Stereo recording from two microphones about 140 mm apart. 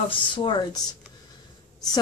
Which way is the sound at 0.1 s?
35° left (ahead or behind).